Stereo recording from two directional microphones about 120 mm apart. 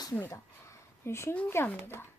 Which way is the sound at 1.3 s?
15° left (ahead or behind).